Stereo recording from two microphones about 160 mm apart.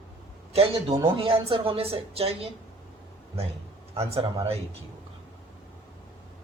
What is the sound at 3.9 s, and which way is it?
Speech, 40° right (ahead or behind).